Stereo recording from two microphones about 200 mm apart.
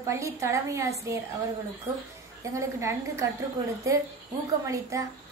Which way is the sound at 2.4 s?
15° right (ahead or behind).